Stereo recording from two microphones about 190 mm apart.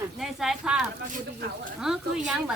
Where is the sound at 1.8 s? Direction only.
5° right (ahead or behind).